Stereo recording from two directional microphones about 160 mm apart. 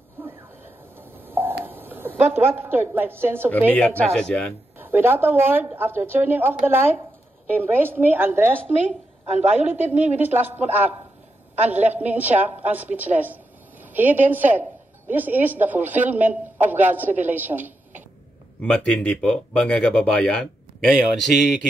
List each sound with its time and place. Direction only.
0.2 s a sound: 15° right (ahead or behind)
1.6 s a woman's voice: 10° right (ahead or behind)
3.7 s speech: 5° left (ahead or behind)
4.7 s a woman's voice: 15° right (ahead or behind)
9.2 s a woman's voice: 45° right (ahead or behind)
9.8 s a woman's voice: 10° right (ahead or behind)
18.6 s speech: 5° left (ahead or behind)